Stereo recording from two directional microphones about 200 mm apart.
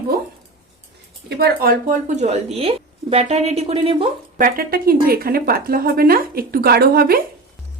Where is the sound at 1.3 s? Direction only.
50° right (ahead or behind); by 4.1 s 30° right (ahead or behind).